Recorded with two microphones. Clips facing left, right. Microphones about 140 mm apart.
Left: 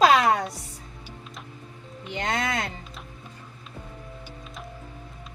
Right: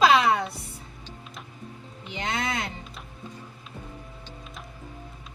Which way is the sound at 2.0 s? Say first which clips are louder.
Left 2 dB; 50° left (ahead or behind).